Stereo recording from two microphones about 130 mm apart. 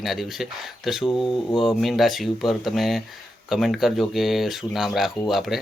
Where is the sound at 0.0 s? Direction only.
Centre (ahead or behind).